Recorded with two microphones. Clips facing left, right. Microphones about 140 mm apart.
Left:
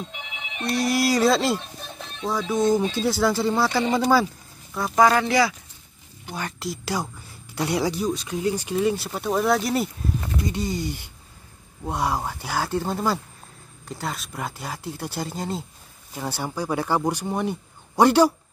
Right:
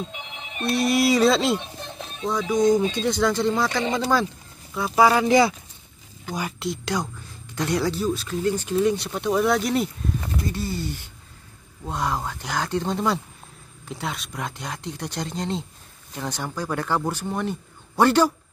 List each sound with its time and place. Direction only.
0.0 s speech: centre (ahead or behind)
1.8 s music: 5° left (ahead or behind)
2.4 s speech: 15° right (ahead or behind)
3.0 s speech: 5° left (ahead or behind)
4.7 s speech: 5° right (ahead or behind)
6.6 s speech: 5° left (ahead or behind)
10.5 s speech: 15° left (ahead or behind)